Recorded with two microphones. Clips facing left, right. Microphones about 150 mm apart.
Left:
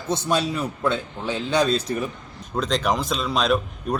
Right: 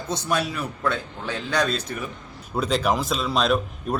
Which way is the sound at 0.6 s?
15° left (ahead or behind).